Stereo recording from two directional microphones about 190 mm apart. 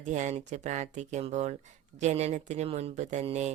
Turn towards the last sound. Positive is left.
turn(degrees=-35)  # may be behind; listen again after turning